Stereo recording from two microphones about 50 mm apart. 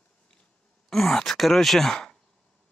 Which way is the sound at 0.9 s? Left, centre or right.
Centre.